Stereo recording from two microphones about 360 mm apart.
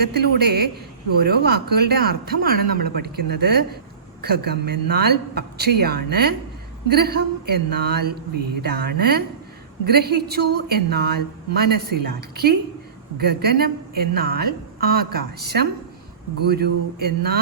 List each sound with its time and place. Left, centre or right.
0.0 s a woman's voice: right